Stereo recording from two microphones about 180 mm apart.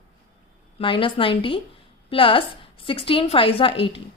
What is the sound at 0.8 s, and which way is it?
A woman's voice, 30° left (ahead or behind).